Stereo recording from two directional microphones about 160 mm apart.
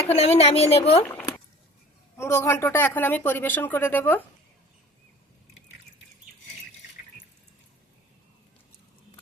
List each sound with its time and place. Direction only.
0.2 s a woman's voice: 40° left (ahead or behind)
1.0 s a sound: 15° left (ahead or behind)
2.1 s speech: 15° left (ahead or behind)